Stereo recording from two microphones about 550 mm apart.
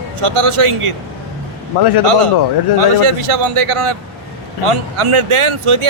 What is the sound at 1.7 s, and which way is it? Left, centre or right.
Speech, left.